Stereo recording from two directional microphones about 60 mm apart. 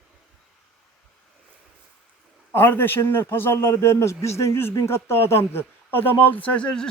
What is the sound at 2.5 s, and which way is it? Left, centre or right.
A man's voice, left.